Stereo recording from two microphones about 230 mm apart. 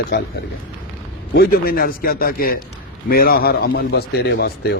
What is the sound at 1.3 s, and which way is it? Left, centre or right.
A man's voice, left.